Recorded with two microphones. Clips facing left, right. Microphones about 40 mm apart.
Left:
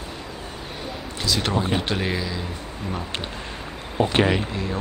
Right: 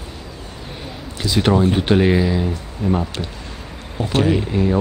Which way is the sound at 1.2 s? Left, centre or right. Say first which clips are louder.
Right 8 dB; centre.